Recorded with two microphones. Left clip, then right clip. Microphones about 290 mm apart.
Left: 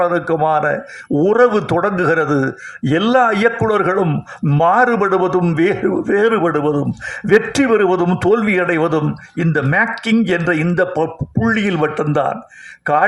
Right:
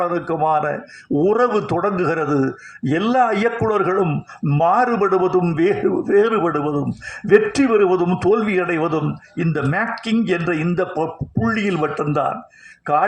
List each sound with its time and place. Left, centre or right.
0.0 s a man's voice: left